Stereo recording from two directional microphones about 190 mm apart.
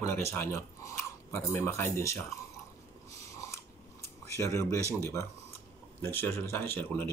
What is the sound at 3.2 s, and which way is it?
Biting, 15° left (ahead or behind).